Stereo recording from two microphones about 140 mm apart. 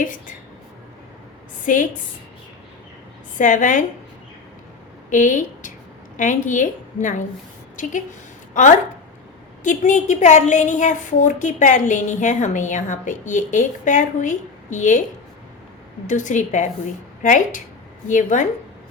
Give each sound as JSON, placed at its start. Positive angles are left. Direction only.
{"t": 1.6, "sound": "a woman's voice", "side_deg": 70}
{"t": 3.3, "sound": "a woman's voice", "side_deg": 65}
{"t": 5.1, "sound": "a woman's voice", "side_deg": 65}
{"t": 16.0, "sound": "a woman's voice", "side_deg": 60}